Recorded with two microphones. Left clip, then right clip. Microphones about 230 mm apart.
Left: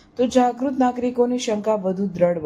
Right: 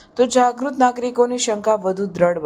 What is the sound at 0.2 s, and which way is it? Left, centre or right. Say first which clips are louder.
A woman's voice: right 3 dB; centre.